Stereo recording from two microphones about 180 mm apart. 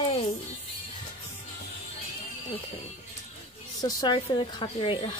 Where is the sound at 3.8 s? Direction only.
20° left (ahead or behind).